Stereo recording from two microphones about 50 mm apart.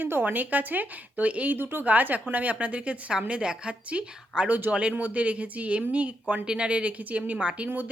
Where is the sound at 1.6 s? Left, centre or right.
Right.